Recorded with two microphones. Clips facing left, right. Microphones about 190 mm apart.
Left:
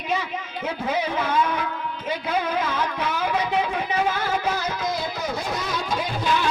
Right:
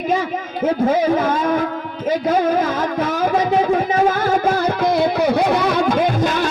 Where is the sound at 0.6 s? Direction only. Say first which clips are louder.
Right 10 dB; 50° right (ahead or behind).